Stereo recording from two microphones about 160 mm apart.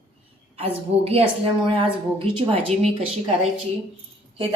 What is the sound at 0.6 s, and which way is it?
A woman's voice, 35° right (ahead or behind).